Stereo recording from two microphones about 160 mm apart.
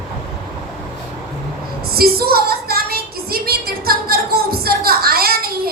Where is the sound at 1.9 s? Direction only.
70° right (ahead or behind).